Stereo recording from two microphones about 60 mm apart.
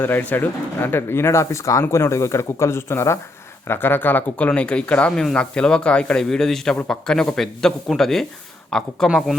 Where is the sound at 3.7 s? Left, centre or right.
Left.